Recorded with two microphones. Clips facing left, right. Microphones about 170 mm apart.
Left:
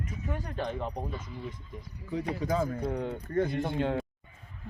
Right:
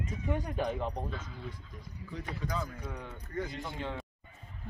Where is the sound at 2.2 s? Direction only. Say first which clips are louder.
Left 7 dB; 40° left (ahead or behind).